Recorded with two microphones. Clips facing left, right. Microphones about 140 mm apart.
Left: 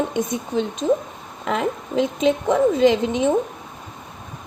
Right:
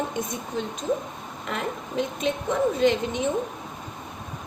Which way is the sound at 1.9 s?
90° left.